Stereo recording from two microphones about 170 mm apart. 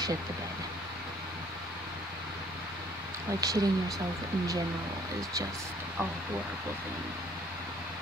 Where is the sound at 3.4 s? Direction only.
20° right (ahead or behind).